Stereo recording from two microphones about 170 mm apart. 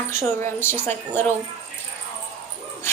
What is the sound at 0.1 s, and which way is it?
A woman's voice, 15° left (ahead or behind).